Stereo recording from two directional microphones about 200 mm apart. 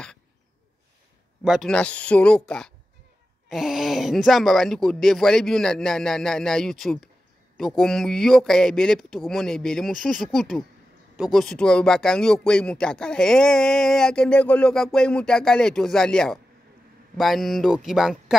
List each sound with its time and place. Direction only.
1.4 s speech: centre (ahead or behind)